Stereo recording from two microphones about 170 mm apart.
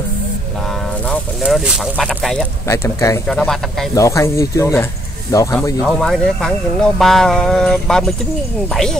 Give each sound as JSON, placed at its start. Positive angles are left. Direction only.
{"t": 1.0, "sound": "speech", "side_deg": 5}
{"t": 2.7, "sound": "speech", "side_deg": 20}
{"t": 3.3, "sound": "speech", "side_deg": 0}
{"t": 3.9, "sound": "speech", "side_deg": 20}
{"t": 5.8, "sound": "speech", "side_deg": 5}